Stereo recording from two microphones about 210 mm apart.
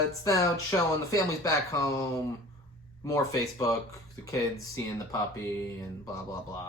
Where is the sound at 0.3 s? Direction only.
15° left (ahead or behind).